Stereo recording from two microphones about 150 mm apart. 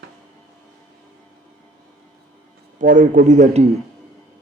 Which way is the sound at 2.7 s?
60° right (ahead or behind).